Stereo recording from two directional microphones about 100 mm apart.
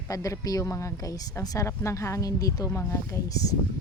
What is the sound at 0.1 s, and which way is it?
Speech, 35° left (ahead or behind).